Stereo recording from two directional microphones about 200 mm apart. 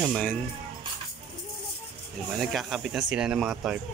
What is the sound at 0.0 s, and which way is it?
Speech, centre (ahead or behind).